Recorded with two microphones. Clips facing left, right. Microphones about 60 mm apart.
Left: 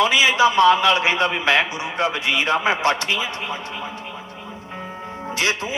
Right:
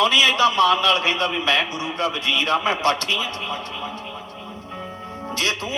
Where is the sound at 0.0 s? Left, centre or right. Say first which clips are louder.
Left 1 dB; centre.